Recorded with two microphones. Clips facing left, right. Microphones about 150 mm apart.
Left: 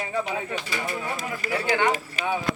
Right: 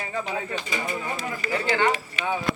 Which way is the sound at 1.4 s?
45° left (ahead or behind).